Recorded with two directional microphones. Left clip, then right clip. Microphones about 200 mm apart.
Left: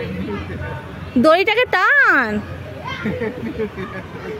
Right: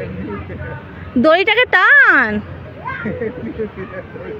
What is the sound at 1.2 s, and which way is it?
A woman's voice, 5° left (ahead or behind).